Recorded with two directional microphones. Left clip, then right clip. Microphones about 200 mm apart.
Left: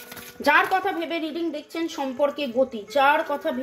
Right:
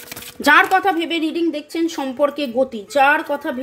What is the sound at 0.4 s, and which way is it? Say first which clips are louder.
Speech: right 6 dB; 30° right (ahead or behind).